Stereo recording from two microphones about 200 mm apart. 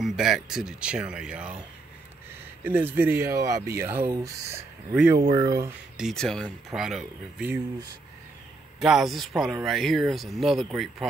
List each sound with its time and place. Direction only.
0.0 s speech: centre (ahead or behind)
2.6 s speech: 10° right (ahead or behind)
5.3 s speech: 20° right (ahead or behind)
5.9 s speech: centre (ahead or behind)
8.7 s speech: centre (ahead or behind)